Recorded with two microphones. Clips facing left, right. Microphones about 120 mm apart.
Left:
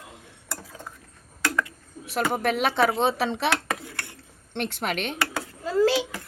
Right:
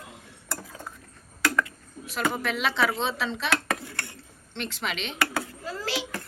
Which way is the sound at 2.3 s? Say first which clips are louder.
Left 4 dB; 55° left (ahead or behind).